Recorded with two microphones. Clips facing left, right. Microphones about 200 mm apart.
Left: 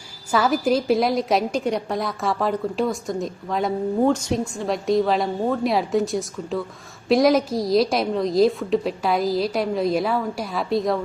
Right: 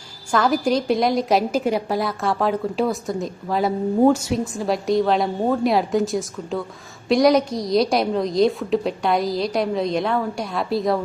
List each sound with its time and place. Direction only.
0.3 s a woman's voice: 5° left (ahead or behind)